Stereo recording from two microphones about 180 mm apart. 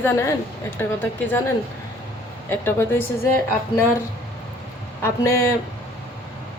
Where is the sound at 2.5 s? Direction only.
10° left (ahead or behind).